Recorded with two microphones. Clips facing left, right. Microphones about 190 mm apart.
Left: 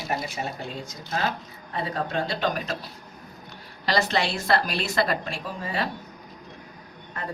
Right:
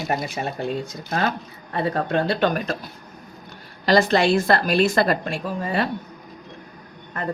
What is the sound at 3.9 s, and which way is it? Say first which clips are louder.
A woman's voice: right 8 dB; 50° right (ahead or behind).